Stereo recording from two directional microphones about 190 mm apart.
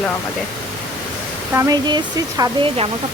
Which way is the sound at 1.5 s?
20° right (ahead or behind).